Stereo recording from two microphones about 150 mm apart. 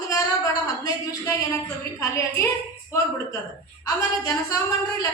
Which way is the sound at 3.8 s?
25° left (ahead or behind).